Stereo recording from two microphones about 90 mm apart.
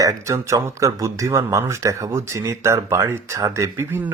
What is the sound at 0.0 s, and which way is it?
Speech, 35° right (ahead or behind).